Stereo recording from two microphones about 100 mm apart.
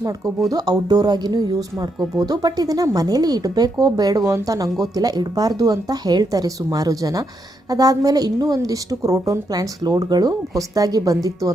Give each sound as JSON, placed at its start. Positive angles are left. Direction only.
{"t": 0.5, "sound": "a woman's voice", "side_deg": -40}